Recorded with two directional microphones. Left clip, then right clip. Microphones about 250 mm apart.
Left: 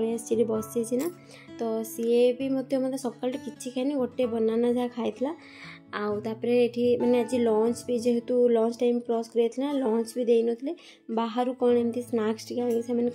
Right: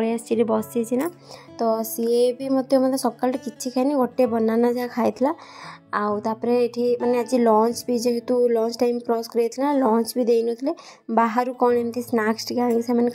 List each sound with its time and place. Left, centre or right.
0.3 s a woman's voice: centre